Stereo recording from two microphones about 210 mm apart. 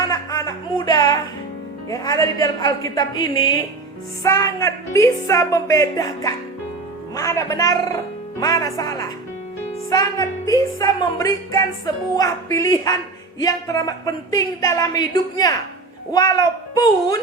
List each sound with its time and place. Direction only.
0.1 s music: 15° left (ahead or behind)
1.9 s a woman's voice: 15° left (ahead or behind)